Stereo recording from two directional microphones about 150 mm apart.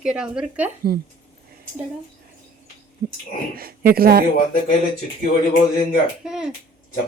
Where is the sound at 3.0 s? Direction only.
80° right.